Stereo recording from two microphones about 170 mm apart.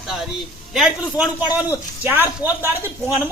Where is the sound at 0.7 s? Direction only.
5° right (ahead or behind).